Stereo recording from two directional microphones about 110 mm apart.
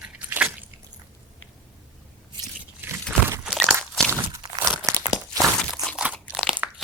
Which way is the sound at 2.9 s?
20° right (ahead or behind).